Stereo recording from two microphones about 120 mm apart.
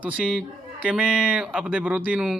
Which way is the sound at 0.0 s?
10° right (ahead or behind).